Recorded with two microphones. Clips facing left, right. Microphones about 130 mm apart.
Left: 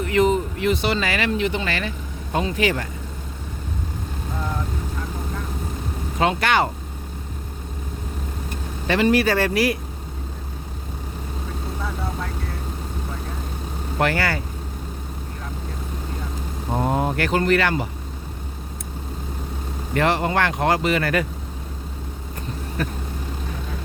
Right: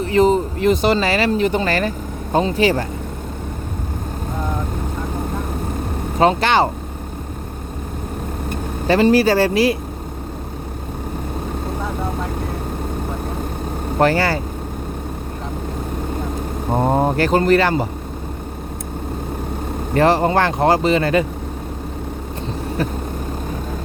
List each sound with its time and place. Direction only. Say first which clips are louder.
0.0 s speech: right 4 dB; 30° right (ahead or behind)
2.3 s speech: right 6 dB; 30° right (ahead or behind)
6.1 s speech: right 5 dB; 30° right (ahead or behind)
8.9 s speech: right 5 dB; 35° right (ahead or behind)
14.0 s speech: right 6 dB; 30° right (ahead or behind)
16.7 s speech: right 5 dB; 35° right (ahead or behind)
19.9 s speech: right 6 dB; 35° right (ahead or behind)